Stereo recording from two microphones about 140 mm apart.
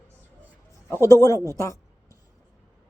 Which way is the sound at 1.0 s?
25° left (ahead or behind).